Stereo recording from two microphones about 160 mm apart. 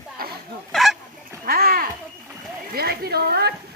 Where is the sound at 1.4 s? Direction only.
70° right (ahead or behind).